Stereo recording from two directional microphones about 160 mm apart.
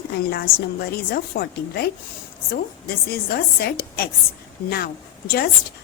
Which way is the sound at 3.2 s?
75° left (ahead or behind).